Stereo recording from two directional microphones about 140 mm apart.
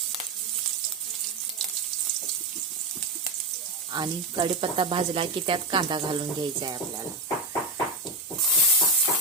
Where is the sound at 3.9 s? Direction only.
35° right (ahead or behind).